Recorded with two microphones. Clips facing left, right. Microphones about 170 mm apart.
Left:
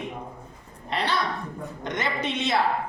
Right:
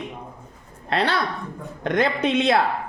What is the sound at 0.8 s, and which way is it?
Speech, 65° right (ahead or behind).